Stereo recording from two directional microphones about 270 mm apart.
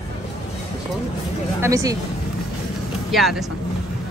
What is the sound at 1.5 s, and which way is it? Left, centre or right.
Speech, centre.